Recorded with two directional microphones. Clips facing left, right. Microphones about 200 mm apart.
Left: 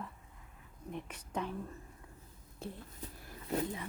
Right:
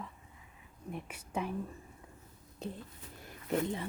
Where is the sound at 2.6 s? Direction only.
20° right (ahead or behind).